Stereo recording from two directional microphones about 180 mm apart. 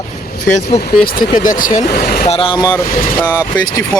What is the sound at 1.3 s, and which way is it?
Speech, 45° left (ahead or behind).